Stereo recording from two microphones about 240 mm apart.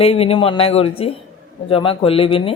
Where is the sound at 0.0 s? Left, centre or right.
Left.